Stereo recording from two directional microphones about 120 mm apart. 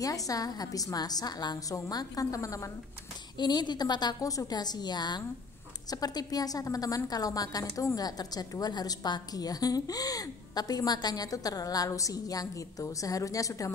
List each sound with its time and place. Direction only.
0.0 s a woman's voice: 30° left (ahead or behind)
3.3 s a woman's voice: 35° left (ahead or behind)